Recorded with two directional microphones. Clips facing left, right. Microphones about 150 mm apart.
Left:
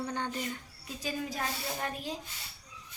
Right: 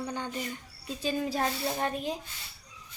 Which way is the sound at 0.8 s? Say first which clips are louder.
Right 6 dB; 30° right (ahead or behind).